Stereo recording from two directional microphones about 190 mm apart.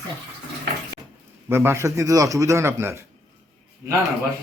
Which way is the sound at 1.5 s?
15° right (ahead or behind).